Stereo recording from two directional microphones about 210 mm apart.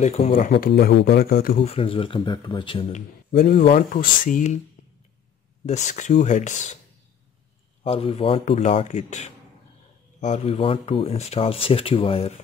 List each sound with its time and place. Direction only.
0.0 s speech: 30° left (ahead or behind)
1.6 s speech: 25° left (ahead or behind)
3.3 s speech: 40° left (ahead or behind)
5.7 s speech: 35° left (ahead or behind)
7.8 s speech: 25° left (ahead or behind)